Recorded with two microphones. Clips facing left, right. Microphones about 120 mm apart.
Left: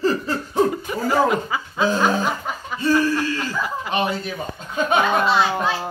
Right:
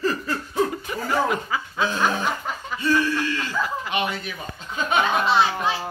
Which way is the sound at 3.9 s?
35° left (ahead or behind).